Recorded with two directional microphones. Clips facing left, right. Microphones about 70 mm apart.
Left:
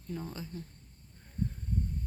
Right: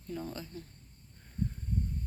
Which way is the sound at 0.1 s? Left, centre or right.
Centre.